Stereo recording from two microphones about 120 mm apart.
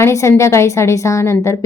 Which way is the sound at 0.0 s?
25° left (ahead or behind).